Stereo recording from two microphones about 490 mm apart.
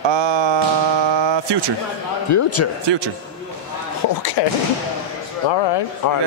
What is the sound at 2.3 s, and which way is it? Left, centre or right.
Speech, left.